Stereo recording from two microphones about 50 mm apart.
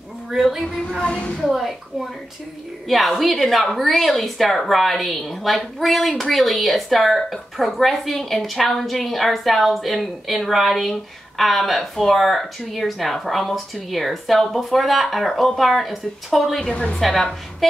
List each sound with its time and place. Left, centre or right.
0.3 s speech: centre
16.7 s a woman's voice: centre
17.0 s speech: centre